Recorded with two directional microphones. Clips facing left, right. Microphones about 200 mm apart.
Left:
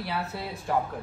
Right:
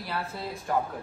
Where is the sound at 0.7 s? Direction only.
Centre (ahead or behind).